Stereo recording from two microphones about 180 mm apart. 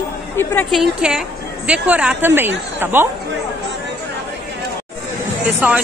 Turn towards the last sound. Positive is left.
turn(degrees=-10)  # may be behind; listen again after turning